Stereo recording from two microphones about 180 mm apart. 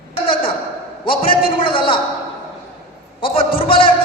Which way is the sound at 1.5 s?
30° left (ahead or behind).